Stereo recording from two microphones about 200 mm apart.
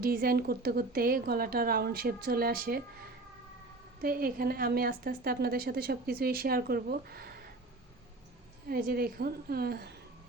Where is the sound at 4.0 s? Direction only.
45° right (ahead or behind).